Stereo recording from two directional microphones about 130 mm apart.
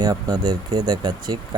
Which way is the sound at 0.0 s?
30° right (ahead or behind).